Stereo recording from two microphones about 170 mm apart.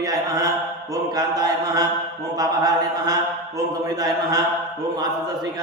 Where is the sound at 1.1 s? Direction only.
20° right (ahead or behind).